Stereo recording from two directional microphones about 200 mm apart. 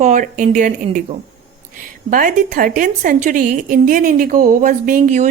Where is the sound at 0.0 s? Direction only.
40° right (ahead or behind).